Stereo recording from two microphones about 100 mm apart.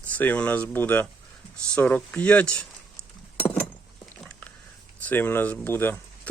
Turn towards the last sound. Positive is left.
turn(degrees=20)  # may be behind; listen again after turning